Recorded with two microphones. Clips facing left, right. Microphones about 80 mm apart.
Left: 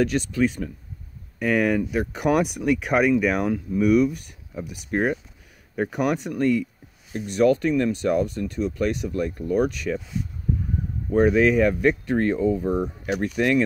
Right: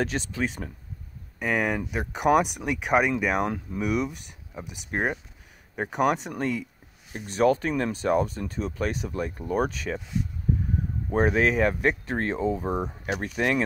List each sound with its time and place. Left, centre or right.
0.0 s speech: right
11.1 s speech: right